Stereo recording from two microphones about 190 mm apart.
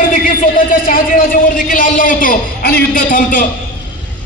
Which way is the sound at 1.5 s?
45° left (ahead or behind).